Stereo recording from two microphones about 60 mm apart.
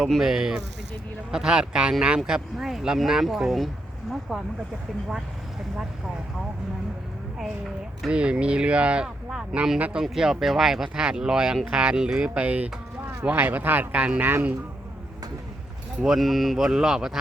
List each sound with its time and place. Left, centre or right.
0.0 s speech: centre
8.1 s speech: centre
10.0 s speech: centre; by 14.3 s right
16.0 s speech: centre